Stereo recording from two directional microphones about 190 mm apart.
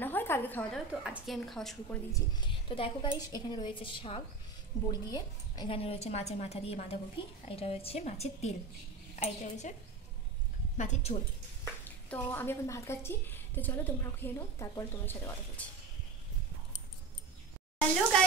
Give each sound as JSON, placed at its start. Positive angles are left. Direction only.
{"t": 0.0, "sound": "a sound", "side_deg": 10}
{"t": 1.0, "sound": "a woman's voice", "side_deg": 0}
{"t": 2.1, "sound": "a woman's voice", "side_deg": 25}
{"t": 10.8, "sound": "a woman's voice", "side_deg": 35}
{"t": 12.1, "sound": "a woman's voice", "side_deg": 10}